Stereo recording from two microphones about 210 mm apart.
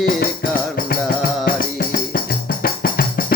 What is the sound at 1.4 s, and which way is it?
Music, 45° left (ahead or behind).